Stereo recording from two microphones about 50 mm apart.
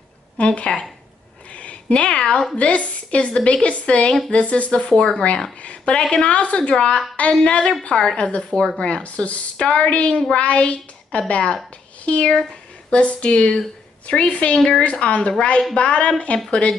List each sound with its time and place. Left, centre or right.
0.4 s speech: left
1.5 s a sound: left
2.0 s speech: centre
2.5 s a woman's voice: left